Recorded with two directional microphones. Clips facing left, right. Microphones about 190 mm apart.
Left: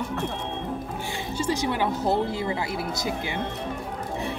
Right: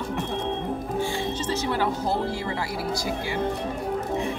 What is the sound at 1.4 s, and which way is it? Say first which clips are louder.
Speech: left 3 dB; 15° left (ahead or behind).